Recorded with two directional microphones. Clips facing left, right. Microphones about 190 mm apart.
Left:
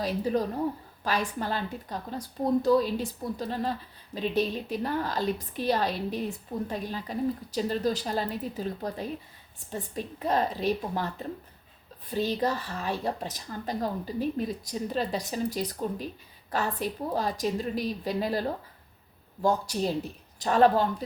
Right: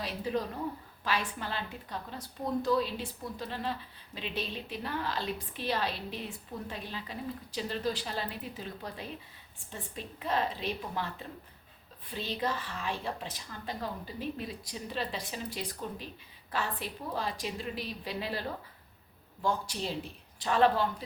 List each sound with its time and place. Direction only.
0.0 s a woman's voice: 40° left (ahead or behind)